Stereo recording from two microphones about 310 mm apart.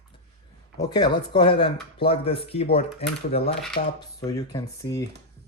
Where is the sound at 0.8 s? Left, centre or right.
Centre.